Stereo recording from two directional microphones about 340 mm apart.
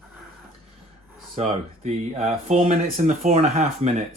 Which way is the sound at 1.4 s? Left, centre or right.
Centre.